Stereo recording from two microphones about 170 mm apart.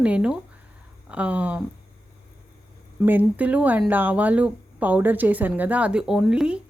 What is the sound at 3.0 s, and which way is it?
Speech, 10° right (ahead or behind).